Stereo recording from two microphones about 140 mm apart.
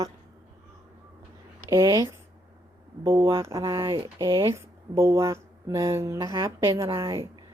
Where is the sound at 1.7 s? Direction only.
20° right (ahead or behind).